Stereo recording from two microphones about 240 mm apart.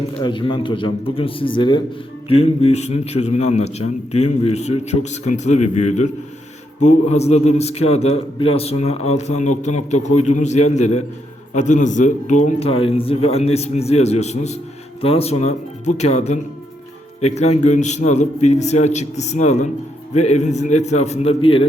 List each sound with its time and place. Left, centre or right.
0.2 s a man's voice: centre